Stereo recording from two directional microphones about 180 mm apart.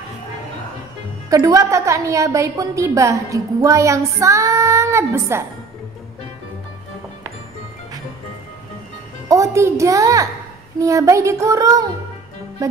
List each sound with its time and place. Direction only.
1.3 s a woman's voice: 20° right (ahead or behind)
9.3 s a woman's voice: 15° right (ahead or behind)